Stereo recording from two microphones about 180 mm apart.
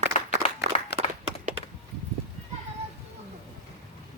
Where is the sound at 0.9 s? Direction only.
70° left (ahead or behind).